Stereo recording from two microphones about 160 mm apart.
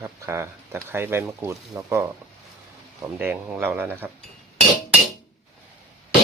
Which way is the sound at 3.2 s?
15° right (ahead or behind).